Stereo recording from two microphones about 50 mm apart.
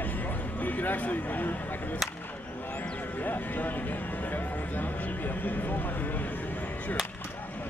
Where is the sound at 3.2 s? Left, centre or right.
Left.